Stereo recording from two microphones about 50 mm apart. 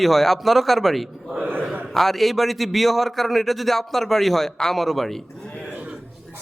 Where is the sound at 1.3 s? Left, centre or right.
Right.